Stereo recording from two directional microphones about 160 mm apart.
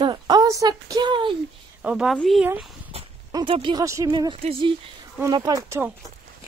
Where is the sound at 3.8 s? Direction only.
20° right (ahead or behind); by 4.7 s 35° right (ahead or behind).